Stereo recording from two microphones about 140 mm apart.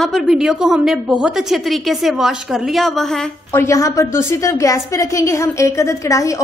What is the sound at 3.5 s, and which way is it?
A woman's voice, 20° left (ahead or behind).